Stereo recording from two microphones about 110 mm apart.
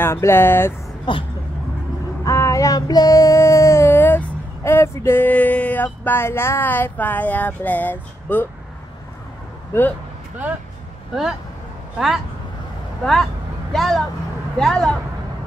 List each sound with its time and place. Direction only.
0.0 s speech: 20° left (ahead or behind)
1.1 s speech: 45° left (ahead or behind)
2.2 s child singing: 25° left (ahead or behind)
4.6 s a sound: 25° left (ahead or behind)
9.7 s speech: 25° left (ahead or behind)
13.0 s speech: centre (ahead or behind)